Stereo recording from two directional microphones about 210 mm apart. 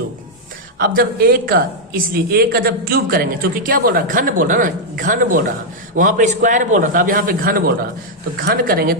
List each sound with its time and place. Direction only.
0.8 s a man's voice: 45° right (ahead or behind)